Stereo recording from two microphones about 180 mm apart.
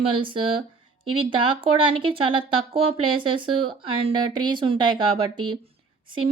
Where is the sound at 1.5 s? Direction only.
30° right (ahead or behind).